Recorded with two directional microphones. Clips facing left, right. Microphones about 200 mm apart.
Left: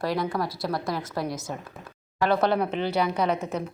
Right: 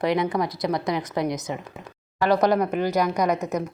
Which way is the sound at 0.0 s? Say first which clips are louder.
Right 4 dB; 20° right (ahead or behind).